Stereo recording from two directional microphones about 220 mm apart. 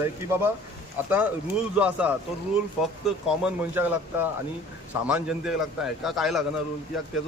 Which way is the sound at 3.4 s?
10° right (ahead or behind).